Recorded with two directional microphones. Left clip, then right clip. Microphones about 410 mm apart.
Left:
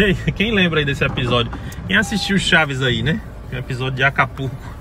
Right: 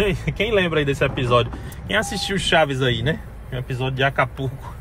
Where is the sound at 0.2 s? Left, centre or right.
Centre.